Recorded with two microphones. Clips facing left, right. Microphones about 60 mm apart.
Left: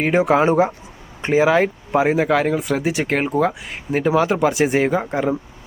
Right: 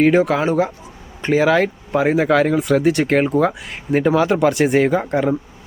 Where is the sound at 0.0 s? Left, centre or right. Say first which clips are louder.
Right 1 dB; centre.